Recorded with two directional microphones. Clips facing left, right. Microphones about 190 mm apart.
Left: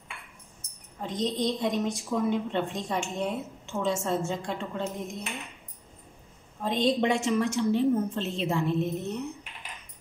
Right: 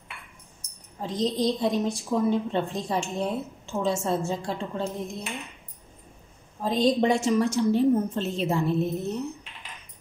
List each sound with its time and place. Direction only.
1.0 s a woman's voice: 35° right (ahead or behind)
6.6 s a woman's voice: 35° right (ahead or behind)